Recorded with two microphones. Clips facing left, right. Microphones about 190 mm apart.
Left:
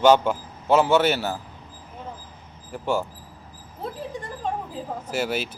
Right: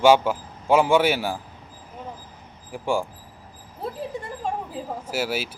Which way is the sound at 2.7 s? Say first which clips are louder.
Even; 10° right (ahead or behind).